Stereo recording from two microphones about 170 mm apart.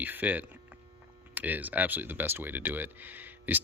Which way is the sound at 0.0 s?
10° right (ahead or behind).